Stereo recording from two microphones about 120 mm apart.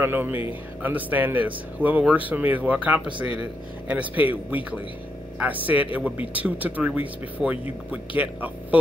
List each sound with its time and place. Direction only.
0.0 s speech: 15° right (ahead or behind)